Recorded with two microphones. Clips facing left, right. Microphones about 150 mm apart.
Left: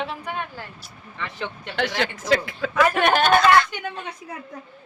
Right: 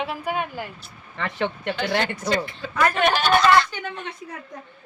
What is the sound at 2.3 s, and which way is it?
Speech, 90° left.